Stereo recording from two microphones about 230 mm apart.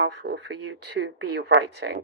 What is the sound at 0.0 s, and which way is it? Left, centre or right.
Speech, right.